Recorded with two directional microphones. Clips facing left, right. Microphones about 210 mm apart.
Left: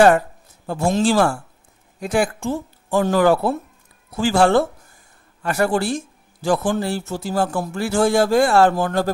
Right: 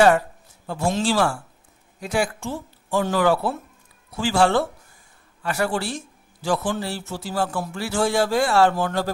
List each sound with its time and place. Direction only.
0.7 s speech: 45° left (ahead or behind)